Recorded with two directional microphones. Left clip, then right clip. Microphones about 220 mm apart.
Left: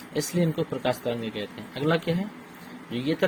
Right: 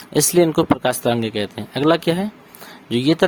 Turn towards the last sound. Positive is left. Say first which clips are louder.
# right 11 dB
turn(degrees=-45)  # may be behind; listen again after turning